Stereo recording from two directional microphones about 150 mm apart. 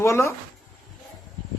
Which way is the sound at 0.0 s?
20° left (ahead or behind).